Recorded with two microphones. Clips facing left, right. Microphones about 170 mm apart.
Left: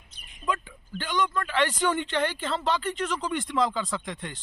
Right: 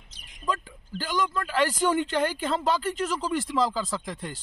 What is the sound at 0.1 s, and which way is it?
Bird, 90° right.